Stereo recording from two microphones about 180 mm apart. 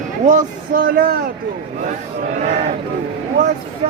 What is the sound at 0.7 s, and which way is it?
Speech, 50° right (ahead or behind).